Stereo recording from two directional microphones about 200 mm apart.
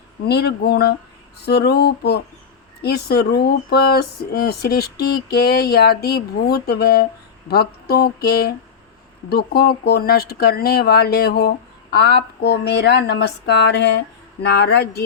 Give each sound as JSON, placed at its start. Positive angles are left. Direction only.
{"t": 0.3, "sound": "speech", "side_deg": 55}